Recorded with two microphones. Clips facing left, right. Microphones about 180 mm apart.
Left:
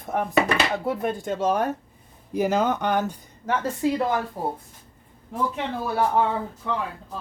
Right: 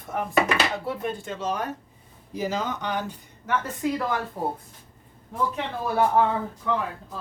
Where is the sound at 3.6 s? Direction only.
25° left (ahead or behind).